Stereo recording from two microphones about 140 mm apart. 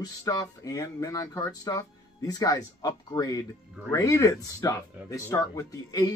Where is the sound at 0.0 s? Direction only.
25° left (ahead or behind).